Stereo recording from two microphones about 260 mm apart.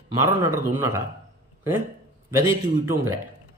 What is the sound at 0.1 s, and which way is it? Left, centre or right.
Speech, centre.